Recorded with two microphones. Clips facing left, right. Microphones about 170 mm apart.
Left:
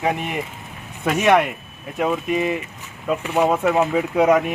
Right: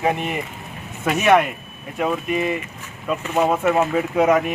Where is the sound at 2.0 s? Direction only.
10° left (ahead or behind).